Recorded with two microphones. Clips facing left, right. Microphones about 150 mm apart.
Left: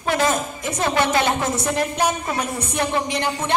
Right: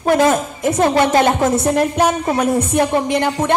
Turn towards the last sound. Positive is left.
turn(degrees=-55)  # may be behind; listen again after turning